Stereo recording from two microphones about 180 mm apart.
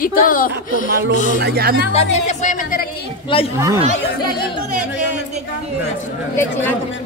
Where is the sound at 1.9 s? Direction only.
40° left (ahead or behind); by 3.1 s 60° left (ahead or behind).